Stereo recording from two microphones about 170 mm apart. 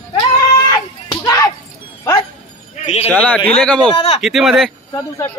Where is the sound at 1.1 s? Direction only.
20° left (ahead or behind).